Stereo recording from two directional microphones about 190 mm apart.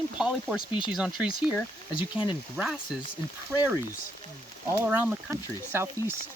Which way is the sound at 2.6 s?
Centre (ahead or behind).